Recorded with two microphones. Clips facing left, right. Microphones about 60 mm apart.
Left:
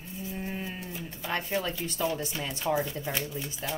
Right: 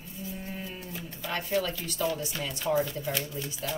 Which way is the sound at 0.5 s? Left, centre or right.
Left.